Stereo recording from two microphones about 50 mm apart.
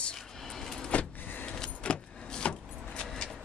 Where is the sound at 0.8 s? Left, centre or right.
Left.